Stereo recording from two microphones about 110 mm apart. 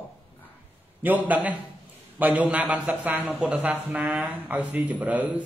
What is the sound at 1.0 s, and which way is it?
A man's voice, 15° right (ahead or behind).